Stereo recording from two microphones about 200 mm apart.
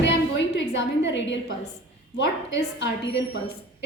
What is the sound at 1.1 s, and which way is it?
Speech, 65° left (ahead or behind).